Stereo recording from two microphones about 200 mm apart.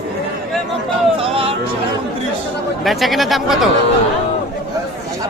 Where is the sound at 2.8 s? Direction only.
Centre (ahead or behind).